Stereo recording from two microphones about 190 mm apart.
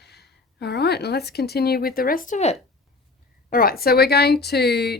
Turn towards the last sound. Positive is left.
turn(degrees=60)  # may be behind; listen again after turning